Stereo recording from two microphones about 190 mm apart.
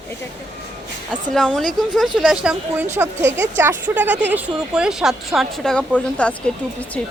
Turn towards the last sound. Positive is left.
turn(degrees=5)  # may be behind; listen again after turning